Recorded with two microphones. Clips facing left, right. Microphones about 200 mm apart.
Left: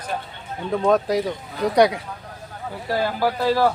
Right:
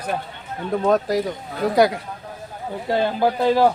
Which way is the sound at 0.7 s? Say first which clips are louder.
Even; centre (ahead or behind).